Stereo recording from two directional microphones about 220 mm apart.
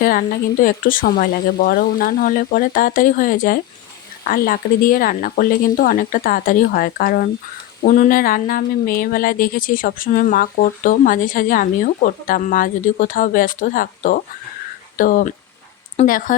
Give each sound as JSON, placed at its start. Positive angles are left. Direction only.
{"t": 0.0, "sound": "speech", "side_deg": 40}